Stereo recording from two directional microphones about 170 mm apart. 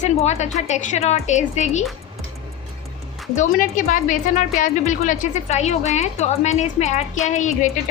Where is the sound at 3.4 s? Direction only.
50° left (ahead or behind).